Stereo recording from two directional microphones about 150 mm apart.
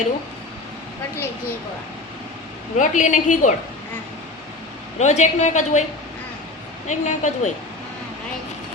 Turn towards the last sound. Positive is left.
turn(degrees=55)  # may be behind; listen again after turning